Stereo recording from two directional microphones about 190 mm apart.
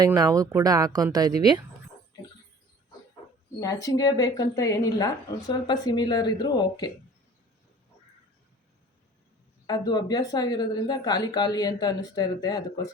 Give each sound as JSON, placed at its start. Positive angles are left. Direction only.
{"t": 0.0, "sound": "speech", "side_deg": -20}
{"t": 3.6, "sound": "speech", "side_deg": 15}
{"t": 9.6, "sound": "speech", "side_deg": 20}